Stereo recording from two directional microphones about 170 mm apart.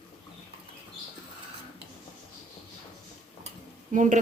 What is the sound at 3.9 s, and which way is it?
Speech, 45° right (ahead or behind).